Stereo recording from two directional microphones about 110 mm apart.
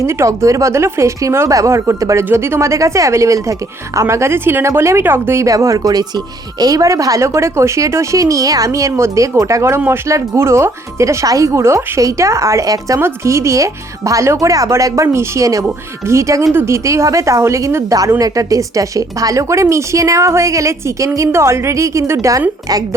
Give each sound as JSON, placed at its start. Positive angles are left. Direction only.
{"t": 0.0, "sound": "speech", "side_deg": -25}